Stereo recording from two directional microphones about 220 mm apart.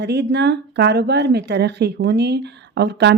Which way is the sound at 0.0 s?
50° right (ahead or behind).